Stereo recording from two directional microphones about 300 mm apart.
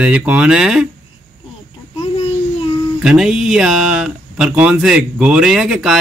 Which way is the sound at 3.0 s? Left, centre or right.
Centre.